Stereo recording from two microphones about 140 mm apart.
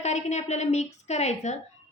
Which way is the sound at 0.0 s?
55° left (ahead or behind).